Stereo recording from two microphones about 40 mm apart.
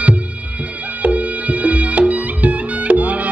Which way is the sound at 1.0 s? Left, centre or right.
Right.